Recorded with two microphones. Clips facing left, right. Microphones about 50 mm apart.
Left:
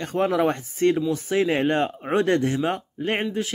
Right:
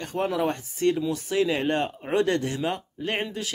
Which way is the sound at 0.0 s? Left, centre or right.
Left.